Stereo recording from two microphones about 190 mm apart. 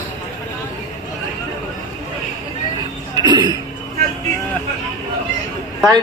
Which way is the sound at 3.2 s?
20° right (ahead or behind).